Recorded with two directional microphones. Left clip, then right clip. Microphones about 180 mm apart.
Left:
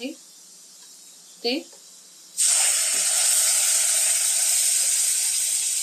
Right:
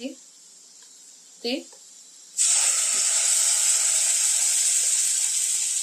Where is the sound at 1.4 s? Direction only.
30° right (ahead or behind).